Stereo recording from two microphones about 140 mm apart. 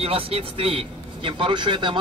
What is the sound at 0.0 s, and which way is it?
A man's voice, 45° right (ahead or behind).